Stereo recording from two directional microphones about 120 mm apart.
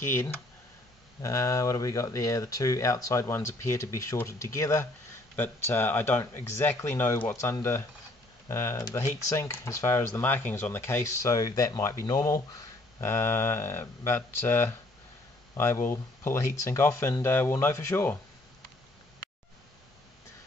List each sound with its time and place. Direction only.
1.2 s speech: 25° left (ahead or behind)